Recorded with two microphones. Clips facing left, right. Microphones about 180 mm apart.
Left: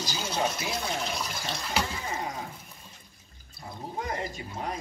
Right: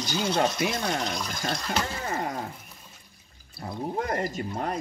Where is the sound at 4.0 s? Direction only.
55° right (ahead or behind).